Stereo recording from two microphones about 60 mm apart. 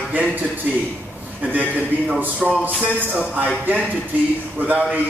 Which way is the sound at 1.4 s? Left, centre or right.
Right.